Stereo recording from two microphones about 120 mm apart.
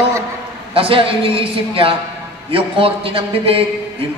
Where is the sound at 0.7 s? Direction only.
50° right (ahead or behind).